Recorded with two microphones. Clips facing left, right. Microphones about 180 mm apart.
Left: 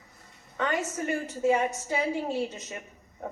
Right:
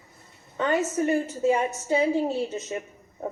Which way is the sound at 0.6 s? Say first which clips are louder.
Right 6 dB; 25° right (ahead or behind).